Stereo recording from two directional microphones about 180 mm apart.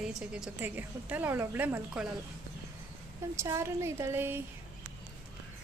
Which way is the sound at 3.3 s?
15° right (ahead or behind).